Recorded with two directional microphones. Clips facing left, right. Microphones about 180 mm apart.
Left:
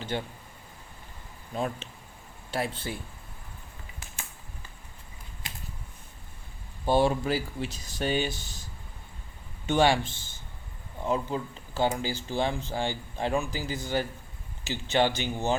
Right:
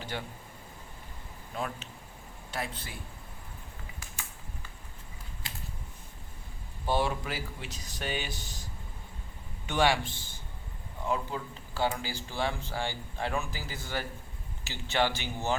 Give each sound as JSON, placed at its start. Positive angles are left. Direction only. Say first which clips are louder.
{"t": 0.1, "sound": "speech", "louder": "left 6 dB", "side_deg": 25}
{"t": 1.5, "sound": "speech", "louder": "left 5 dB", "side_deg": 30}
{"t": 5.4, "sound": "typing", "louder": "left 2 dB", "side_deg": 20}
{"t": 6.8, "sound": "speech", "louder": "left 6 dB", "side_deg": 30}
{"t": 9.6, "sound": "speech", "louder": "left 4 dB", "side_deg": 25}